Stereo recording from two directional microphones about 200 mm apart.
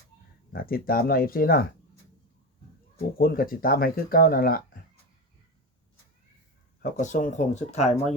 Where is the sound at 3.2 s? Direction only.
45° left (ahead or behind).